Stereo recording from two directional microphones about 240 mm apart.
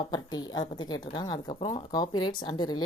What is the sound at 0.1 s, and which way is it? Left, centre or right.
A woman's voice, centre.